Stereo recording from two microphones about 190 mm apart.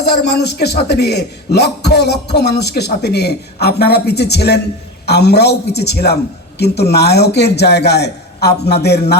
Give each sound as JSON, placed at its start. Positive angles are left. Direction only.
{"t": 0.0, "sound": "a man's voice", "side_deg": 60}